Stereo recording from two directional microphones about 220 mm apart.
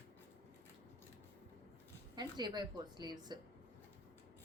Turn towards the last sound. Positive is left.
turn(degrees=-20)  # may be behind; listen again after turning